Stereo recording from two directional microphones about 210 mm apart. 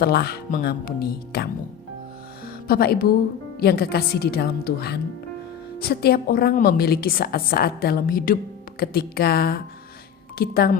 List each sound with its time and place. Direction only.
0.0 s a woman's voice: 50° left (ahead or behind)
2.6 s a woman's voice: 45° left (ahead or behind)